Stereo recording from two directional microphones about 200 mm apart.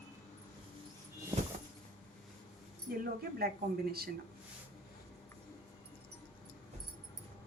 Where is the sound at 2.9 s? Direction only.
50° right (ahead or behind).